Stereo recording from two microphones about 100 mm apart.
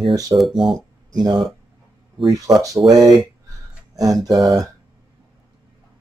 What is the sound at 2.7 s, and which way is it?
Speech, centre (ahead or behind).